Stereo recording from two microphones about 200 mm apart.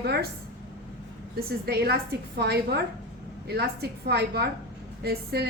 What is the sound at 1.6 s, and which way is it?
A woman's voice, 50° right (ahead or behind).